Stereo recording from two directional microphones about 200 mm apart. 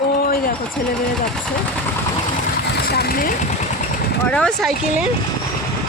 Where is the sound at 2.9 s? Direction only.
50° left (ahead or behind).